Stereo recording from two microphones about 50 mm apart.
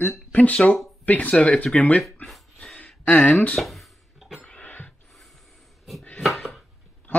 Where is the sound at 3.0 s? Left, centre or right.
Left.